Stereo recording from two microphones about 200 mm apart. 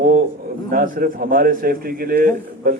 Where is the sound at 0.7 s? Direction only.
45° right (ahead or behind).